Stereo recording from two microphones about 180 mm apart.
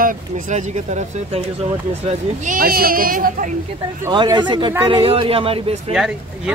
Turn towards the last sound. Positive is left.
turn(degrees=-5)  # may be behind; listen again after turning